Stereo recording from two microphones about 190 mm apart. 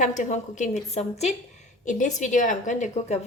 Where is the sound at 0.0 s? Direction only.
40° left (ahead or behind).